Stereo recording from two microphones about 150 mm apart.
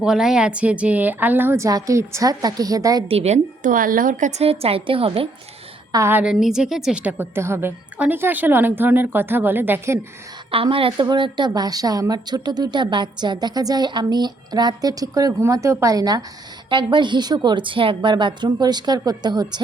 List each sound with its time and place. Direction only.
0.0 s a woman's voice: 5° right (ahead or behind); by 3.0 s 25° right (ahead or behind)
3.1 s a woman's voice: 45° right (ahead or behind)
5.9 s a woman's voice: 15° right (ahead or behind)
10.5 s a woman's voice: 35° right (ahead or behind)